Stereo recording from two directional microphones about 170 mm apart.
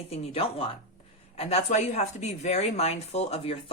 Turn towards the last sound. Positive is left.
turn(degrees=35)  # may be behind; listen again after turning